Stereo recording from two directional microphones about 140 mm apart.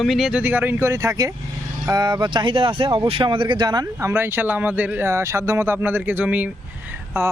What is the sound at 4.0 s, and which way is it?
A man's voice, 15° right (ahead or behind).